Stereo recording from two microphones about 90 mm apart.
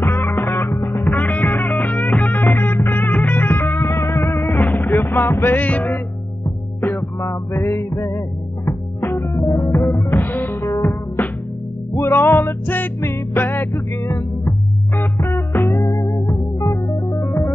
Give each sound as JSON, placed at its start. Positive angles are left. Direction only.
{"t": 0.0, "sound": "music", "side_deg": 25}
{"t": 7.0, "sound": "music", "side_deg": 35}
{"t": 11.9, "sound": "music", "side_deg": 30}
{"t": 15.6, "sound": "music", "side_deg": 40}